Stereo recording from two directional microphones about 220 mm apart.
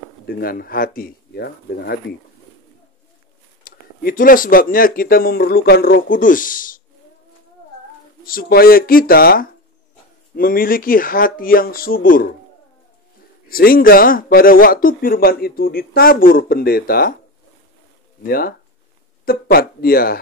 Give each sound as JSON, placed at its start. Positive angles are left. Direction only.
{"t": 0.4, "sound": "speech", "side_deg": 40}
{"t": 3.6, "sound": "speech", "side_deg": 40}
{"t": 8.3, "sound": "speech", "side_deg": 40}
{"t": 13.5, "sound": "speech", "side_deg": 40}
{"t": 18.2, "sound": "speech", "side_deg": 40}